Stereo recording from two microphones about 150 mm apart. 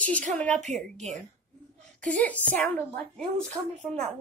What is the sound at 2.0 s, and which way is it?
A woman's voice, 10° left (ahead or behind).